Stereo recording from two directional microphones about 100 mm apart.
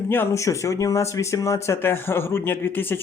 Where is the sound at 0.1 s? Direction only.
25° left (ahead or behind).